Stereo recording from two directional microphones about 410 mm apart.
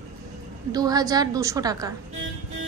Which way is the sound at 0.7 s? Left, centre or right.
Centre.